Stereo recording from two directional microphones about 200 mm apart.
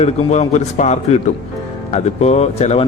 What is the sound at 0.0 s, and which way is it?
Speech, 35° left (ahead or behind).